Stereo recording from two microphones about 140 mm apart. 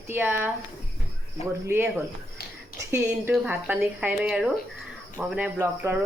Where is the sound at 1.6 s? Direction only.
15° right (ahead or behind).